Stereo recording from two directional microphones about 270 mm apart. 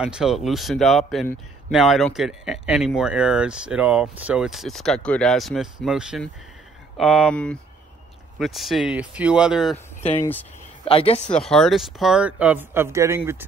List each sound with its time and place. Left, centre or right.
0.0 s a man's voice: centre
10.9 s speech: left
11.3 s a man's voice: centre